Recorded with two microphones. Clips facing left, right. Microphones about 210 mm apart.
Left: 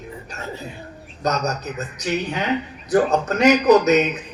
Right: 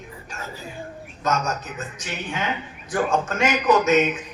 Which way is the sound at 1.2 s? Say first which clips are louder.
Left 2 dB; 40° left (ahead or behind).